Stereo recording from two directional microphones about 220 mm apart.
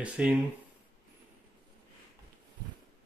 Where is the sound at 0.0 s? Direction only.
5° right (ahead or behind).